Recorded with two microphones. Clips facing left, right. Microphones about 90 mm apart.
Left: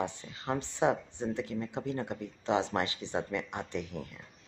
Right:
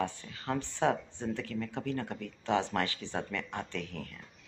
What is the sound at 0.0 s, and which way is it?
Speech, 20° left (ahead or behind).